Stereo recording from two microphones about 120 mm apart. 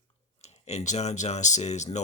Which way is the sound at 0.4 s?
65° left (ahead or behind).